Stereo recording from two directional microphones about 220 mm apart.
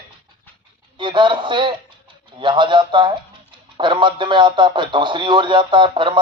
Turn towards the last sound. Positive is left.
turn(degrees=-20)  # may be behind; listen again after turning